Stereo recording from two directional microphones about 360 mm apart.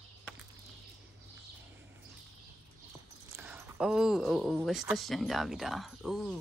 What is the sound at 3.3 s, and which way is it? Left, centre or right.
Speech, centre.